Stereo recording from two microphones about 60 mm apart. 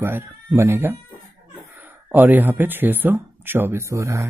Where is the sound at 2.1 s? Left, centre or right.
Right.